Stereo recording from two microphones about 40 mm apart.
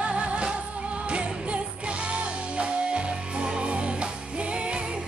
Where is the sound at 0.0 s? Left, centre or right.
Right.